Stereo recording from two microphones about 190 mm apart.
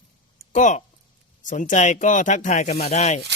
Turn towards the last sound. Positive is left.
turn(degrees=35)  # may be behind; listen again after turning